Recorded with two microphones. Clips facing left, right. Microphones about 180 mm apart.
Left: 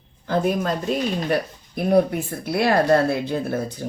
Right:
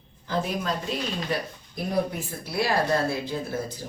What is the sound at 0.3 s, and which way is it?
A woman's voice, 55° left (ahead or behind).